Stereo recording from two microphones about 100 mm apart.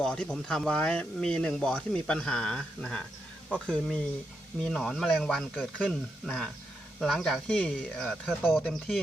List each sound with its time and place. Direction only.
0.0 s speech: 5° left (ahead or behind)